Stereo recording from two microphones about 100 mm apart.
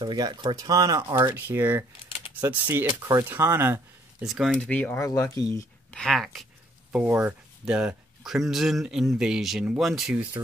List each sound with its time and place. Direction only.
0.0 s speech: 50° right (ahead or behind); by 3.8 s 25° right (ahead or behind)
4.2 s speech: 5° right (ahead or behind)
4.6 s speech: 15° left (ahead or behind)
5.0 s speech: 30° left (ahead or behind)
5.9 s speech: 5° left (ahead or behind)
7.1 s speech: 15° right (ahead or behind); by 10.1 s centre (ahead or behind)
10.1 s speech: 15° right (ahead or behind)